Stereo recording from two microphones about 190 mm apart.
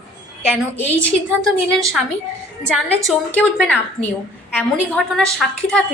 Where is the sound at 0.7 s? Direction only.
10° left (ahead or behind).